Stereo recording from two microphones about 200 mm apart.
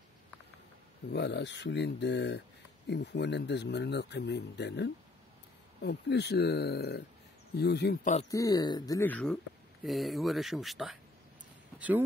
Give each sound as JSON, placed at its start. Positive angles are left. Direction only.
{"t": 1.1, "sound": "speech", "side_deg": 60}
{"t": 8.3, "sound": "speech", "side_deg": 20}